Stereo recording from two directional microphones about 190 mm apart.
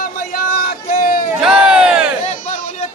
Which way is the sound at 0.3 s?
55° left (ahead or behind).